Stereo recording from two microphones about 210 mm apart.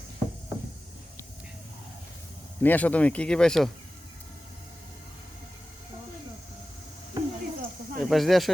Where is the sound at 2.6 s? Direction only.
5° left (ahead or behind).